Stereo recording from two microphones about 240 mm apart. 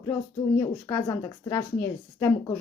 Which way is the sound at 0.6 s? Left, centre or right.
Centre.